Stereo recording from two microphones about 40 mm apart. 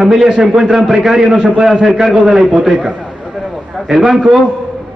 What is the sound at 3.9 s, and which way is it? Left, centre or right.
Speech, centre.